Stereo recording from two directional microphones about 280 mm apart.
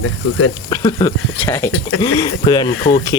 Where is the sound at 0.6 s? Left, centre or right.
Centre.